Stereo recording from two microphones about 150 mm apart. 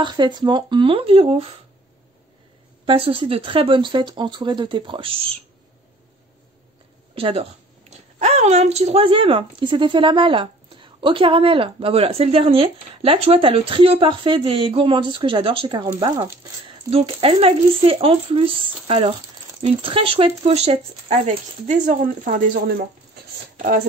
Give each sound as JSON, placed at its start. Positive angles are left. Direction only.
{"t": 0.0, "sound": "speech", "side_deg": -30}
{"t": 2.8, "sound": "speech", "side_deg": -40}
{"t": 7.2, "sound": "speech", "side_deg": -40}